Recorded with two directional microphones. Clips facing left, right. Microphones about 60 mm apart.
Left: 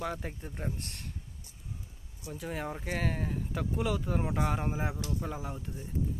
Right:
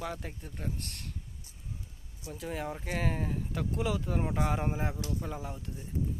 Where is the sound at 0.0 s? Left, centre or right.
Centre.